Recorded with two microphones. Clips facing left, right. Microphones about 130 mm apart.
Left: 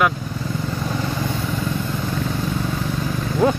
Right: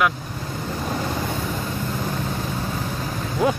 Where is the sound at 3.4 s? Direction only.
10° right (ahead or behind).